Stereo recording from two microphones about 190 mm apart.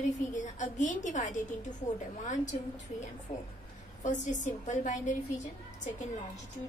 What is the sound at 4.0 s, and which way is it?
A woman's voice, 40° left (ahead or behind).